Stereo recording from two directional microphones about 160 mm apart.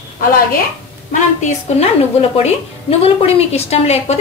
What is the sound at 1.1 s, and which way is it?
Speech, 50° left (ahead or behind).